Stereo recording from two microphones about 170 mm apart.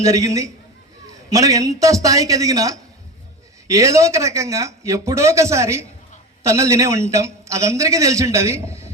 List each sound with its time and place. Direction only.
0.0 s a man's voice: 20° right (ahead or behind)